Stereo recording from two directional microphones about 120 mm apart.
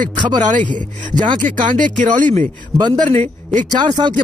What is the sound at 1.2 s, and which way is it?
Speech, 90° right.